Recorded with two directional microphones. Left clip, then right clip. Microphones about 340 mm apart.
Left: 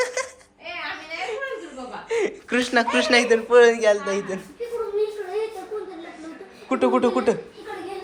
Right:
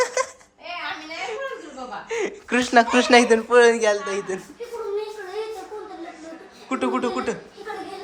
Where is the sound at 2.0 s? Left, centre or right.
Centre.